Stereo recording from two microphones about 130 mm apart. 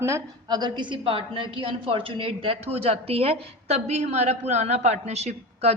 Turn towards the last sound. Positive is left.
turn(degrees=-55)  # may be behind; listen again after turning